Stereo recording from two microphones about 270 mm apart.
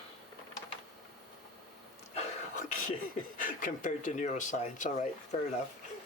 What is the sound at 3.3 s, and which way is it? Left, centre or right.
Speech, left.